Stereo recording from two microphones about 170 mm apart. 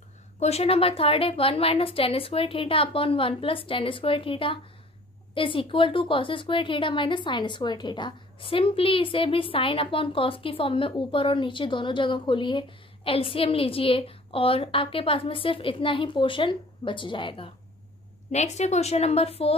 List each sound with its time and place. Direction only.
0.4 s a woman's voice: 40° left (ahead or behind)
18.3 s a woman's voice: 40° left (ahead or behind)